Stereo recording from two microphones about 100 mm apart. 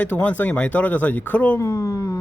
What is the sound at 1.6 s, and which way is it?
Speech, 30° left (ahead or behind).